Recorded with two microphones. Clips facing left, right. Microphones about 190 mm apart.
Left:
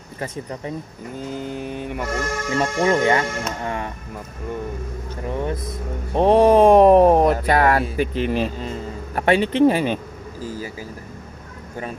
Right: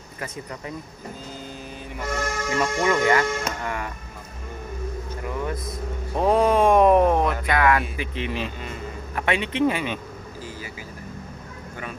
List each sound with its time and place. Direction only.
0.2 s speech: 30° left (ahead or behind)
1.3 s vehicle: 60° left (ahead or behind)
2.5 s speech: 30° left (ahead or behind)
5.3 s speech: 30° left (ahead or behind)
10.4 s vehicle: 40° left (ahead or behind)